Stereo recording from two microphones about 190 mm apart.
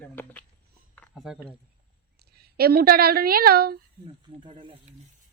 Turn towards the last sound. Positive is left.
turn(degrees=-25)  # may be behind; listen again after turning